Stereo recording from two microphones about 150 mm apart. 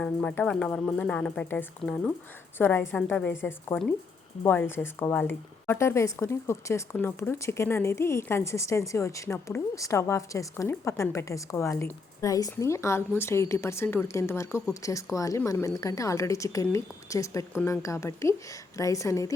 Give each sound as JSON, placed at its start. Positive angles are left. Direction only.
{"t": 0.0, "sound": "a woman's voice", "side_deg": 10}